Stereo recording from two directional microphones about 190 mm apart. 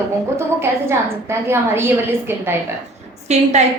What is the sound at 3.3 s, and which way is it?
Speech, 35° right (ahead or behind).